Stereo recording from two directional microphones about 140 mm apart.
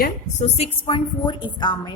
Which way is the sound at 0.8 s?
35° left (ahead or behind).